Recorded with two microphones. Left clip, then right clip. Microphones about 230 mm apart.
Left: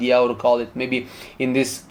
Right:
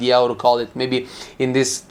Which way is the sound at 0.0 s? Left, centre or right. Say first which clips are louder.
Right 2 dB; right.